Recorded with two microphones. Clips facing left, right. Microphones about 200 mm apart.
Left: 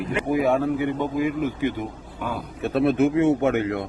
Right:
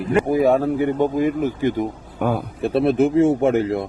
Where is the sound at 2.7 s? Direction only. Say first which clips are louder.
Right 2 dB; 30° right (ahead or behind).